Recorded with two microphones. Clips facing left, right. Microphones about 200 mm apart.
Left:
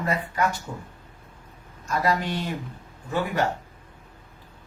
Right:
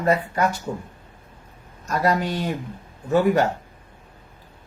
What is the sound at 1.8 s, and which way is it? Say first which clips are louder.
Speech: right 3 dB; 40° right (ahead or behind).